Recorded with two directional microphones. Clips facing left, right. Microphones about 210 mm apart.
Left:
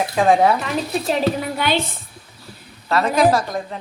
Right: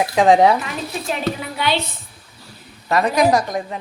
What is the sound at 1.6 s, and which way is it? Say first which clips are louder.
Speech: left 1 dB; 50° left (ahead or behind).